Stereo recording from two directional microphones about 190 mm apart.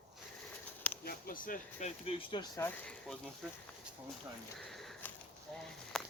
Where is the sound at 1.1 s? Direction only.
50° left (ahead or behind); by 2.7 s 20° left (ahead or behind).